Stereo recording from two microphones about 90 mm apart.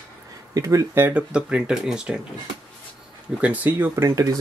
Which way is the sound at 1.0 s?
25° right (ahead or behind).